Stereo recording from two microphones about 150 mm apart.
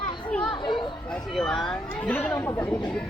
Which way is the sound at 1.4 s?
5° left (ahead or behind).